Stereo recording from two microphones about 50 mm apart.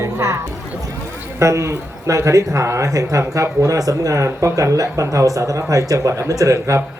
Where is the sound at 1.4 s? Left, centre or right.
Right.